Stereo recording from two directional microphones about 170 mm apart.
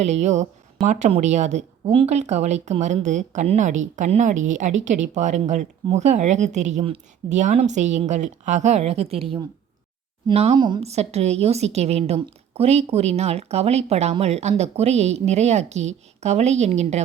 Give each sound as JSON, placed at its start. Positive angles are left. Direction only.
{"t": 0.0, "sound": "a woman's voice", "side_deg": -40}